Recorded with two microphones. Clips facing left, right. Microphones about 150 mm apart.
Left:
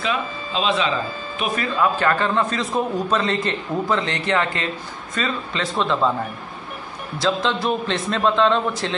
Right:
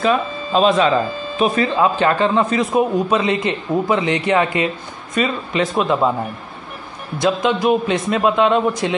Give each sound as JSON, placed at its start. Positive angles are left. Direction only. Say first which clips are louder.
{"t": 0.0, "sound": "speech", "louder": "right 7 dB", "side_deg": -45}
{"t": 1.4, "sound": "a man's voice", "louder": "right 5 dB", "side_deg": -30}
{"t": 7.2, "sound": "a man's voice", "louder": "right 4 dB", "side_deg": -15}